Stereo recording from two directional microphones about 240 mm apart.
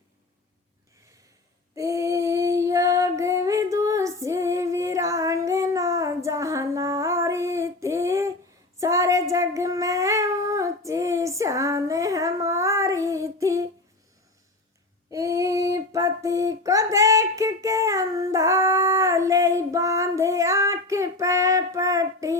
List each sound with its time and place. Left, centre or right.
1.7 s female singing: centre
8.8 s child singing: centre
15.1 s child singing: centre